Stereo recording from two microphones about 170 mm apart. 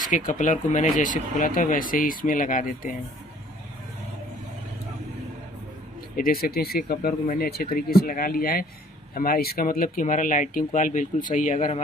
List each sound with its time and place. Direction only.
0.1 s speech: 50° left (ahead or behind)
6.1 s speech: 60° left (ahead or behind)